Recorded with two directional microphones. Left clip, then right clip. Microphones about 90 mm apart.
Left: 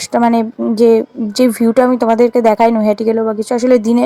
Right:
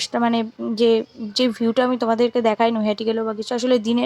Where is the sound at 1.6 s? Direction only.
30° left (ahead or behind).